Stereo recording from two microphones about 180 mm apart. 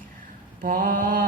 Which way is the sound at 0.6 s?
50° right (ahead or behind).